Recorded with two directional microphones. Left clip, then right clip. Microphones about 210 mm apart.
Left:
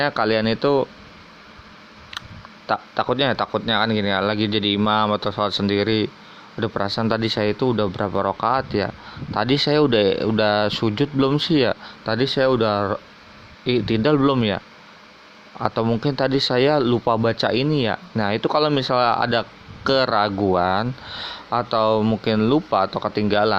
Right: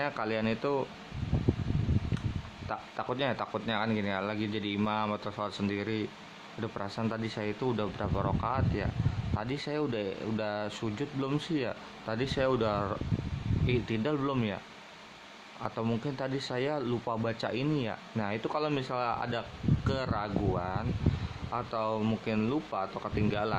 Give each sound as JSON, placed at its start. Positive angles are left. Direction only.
{"t": 0.0, "sound": "speech", "side_deg": 30}
{"t": 2.6, "sound": "speech", "side_deg": 30}
{"t": 15.6, "sound": "speech", "side_deg": 30}